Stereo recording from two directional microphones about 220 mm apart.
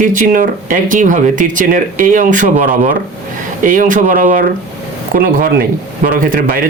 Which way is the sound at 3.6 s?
35° right (ahead or behind).